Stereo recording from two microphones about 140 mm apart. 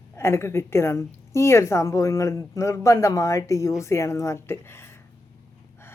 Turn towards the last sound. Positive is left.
turn(degrees=15)  # may be behind; listen again after turning